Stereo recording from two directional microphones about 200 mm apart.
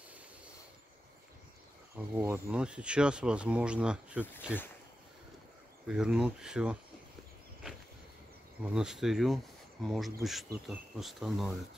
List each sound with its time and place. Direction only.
2.0 s speech: 10° right (ahead or behind)
5.9 s speech: 5° right (ahead or behind)
7.7 s a sound: 5° right (ahead or behind)
8.6 s speech: 5° right (ahead or behind)